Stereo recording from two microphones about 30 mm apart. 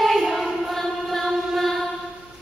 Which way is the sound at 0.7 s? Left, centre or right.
Centre.